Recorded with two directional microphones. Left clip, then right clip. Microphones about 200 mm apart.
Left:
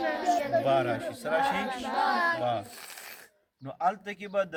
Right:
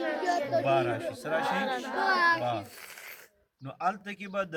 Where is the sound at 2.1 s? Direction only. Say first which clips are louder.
Right 6 dB; 65° right (ahead or behind).